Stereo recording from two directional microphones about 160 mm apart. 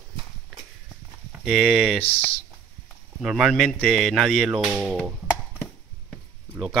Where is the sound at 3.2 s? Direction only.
Centre (ahead or behind).